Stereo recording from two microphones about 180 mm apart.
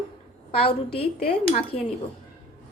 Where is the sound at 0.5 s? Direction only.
30° left (ahead or behind).